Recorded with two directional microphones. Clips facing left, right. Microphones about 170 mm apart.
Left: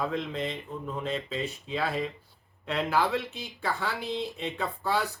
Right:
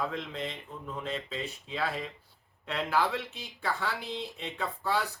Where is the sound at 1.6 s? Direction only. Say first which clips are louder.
Left 3 dB; 20° left (ahead or behind).